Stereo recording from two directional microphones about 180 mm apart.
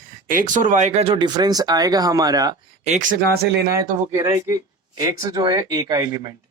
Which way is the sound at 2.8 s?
40° right (ahead or behind).